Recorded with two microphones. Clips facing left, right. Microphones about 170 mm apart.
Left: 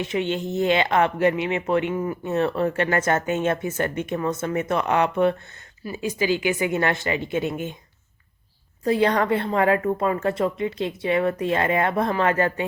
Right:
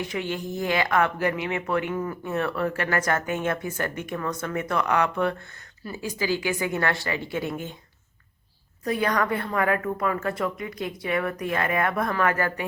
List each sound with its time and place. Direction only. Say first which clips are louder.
0.0 s speech: left 5 dB; 25° left (ahead or behind)
8.8 s speech: left 5 dB; 30° left (ahead or behind)